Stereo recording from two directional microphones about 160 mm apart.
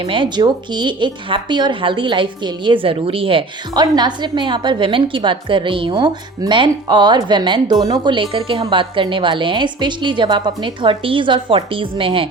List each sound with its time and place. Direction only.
0.0 s a woman's voice: 30° right (ahead or behind)